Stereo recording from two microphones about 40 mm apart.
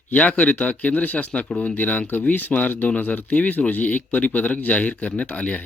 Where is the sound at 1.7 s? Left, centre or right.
Left.